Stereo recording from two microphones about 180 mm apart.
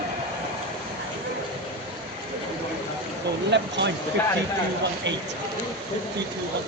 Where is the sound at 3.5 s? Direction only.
75° right (ahead or behind).